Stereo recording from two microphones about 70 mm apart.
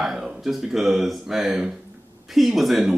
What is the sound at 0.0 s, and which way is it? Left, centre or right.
A man's voice, centre.